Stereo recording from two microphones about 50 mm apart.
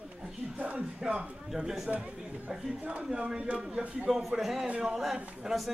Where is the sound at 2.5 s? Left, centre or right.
Centre.